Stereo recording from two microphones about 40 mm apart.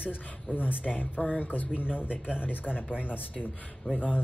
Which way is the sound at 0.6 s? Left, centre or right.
Left.